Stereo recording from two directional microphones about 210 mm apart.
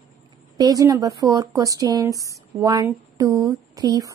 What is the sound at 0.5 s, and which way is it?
Speech, 15° right (ahead or behind).